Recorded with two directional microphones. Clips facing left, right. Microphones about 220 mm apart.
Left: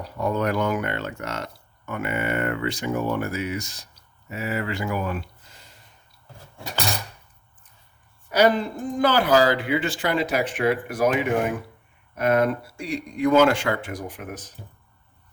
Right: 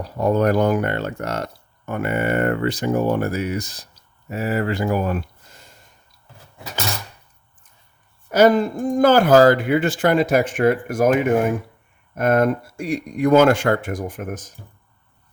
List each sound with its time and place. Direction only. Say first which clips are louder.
0.2 s speech: right 6 dB; 40° right (ahead or behind)
8.3 s speech: right 5 dB; 45° right (ahead or behind)